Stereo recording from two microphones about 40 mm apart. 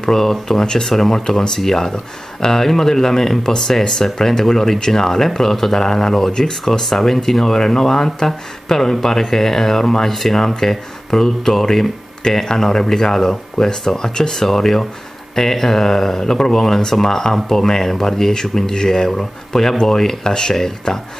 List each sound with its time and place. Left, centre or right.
0.0 s speech: centre